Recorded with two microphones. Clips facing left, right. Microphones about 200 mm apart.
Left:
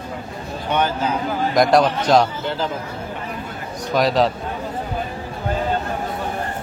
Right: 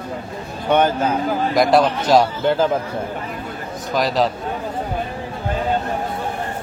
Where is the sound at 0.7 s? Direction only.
50° right (ahead or behind).